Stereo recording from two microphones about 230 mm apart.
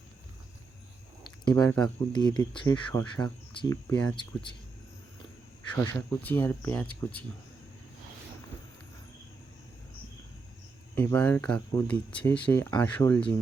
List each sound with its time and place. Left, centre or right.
1.5 s speech: centre
5.7 s speech: centre
10.9 s speech: centre